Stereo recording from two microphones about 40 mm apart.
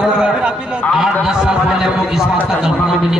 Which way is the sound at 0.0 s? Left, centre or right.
Centre.